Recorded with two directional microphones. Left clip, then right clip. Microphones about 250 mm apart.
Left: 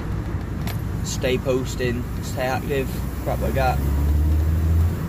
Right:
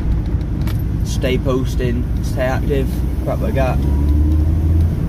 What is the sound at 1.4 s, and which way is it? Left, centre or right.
Speech, centre.